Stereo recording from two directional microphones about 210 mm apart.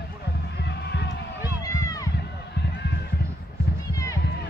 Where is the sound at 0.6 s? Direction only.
55° left (ahead or behind).